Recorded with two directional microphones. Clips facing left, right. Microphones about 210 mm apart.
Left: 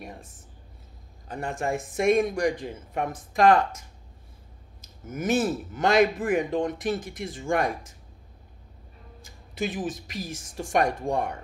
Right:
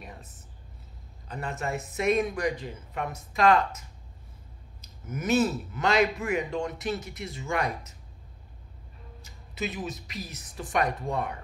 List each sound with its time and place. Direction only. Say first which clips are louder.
0.0 s speech: left 4 dB; 45° left (ahead or behind)
4.8 s speech: left 2 dB; 45° left (ahead or behind)
9.2 s speech: left 3 dB; 50° left (ahead or behind)